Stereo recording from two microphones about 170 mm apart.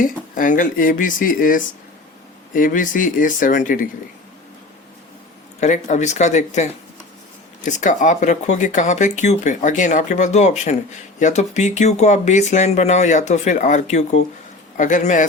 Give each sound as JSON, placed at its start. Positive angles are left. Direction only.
{"t": 0.0, "sound": "speech", "side_deg": 50}
{"t": 5.5, "sound": "speech", "side_deg": 45}